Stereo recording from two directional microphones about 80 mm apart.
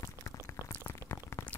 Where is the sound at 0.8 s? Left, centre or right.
Left.